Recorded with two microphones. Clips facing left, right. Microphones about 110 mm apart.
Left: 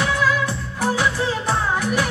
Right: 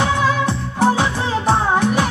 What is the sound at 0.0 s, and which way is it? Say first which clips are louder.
Music: right 3 dB; 25° right (ahead or behind).